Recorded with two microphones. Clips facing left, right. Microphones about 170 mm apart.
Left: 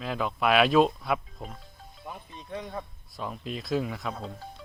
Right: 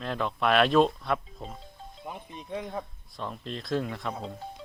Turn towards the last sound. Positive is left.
turn(degrees=-20)  # may be behind; listen again after turning